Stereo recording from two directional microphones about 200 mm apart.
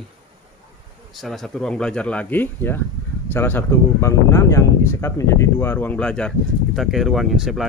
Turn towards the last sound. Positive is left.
turn(degrees=0)  # may be behind; listen again after turning